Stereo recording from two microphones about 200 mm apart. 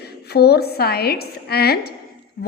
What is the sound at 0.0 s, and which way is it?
A woman's voice, 55° left (ahead or behind).